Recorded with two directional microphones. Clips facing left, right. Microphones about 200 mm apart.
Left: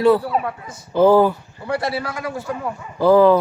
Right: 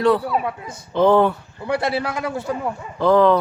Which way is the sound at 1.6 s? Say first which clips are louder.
Right 1 dB; 20° right (ahead or behind).